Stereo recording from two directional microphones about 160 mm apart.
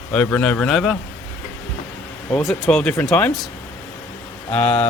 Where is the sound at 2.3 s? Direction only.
Centre (ahead or behind).